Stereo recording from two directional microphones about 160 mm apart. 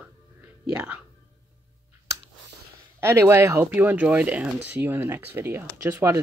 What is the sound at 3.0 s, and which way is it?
Speech, 15° right (ahead or behind).